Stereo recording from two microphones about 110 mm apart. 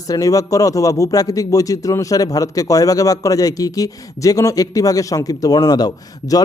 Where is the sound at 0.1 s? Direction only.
30° left (ahead or behind).